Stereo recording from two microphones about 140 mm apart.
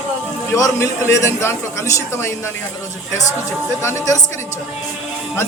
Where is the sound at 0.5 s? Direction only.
20° left (ahead or behind).